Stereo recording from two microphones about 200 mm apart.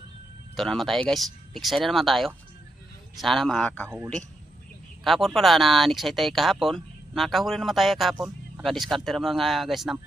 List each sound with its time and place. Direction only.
0.5 s speech: centre (ahead or behind)
3.8 s a man's voice: 10° right (ahead or behind)
5.0 s speech: centre (ahead or behind)